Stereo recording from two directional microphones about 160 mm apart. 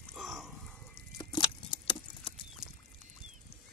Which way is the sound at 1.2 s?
30° left (ahead or behind).